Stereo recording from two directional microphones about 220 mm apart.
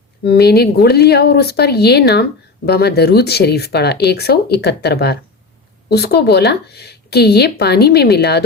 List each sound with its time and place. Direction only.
0.3 s a woman's voice: 45° left (ahead or behind)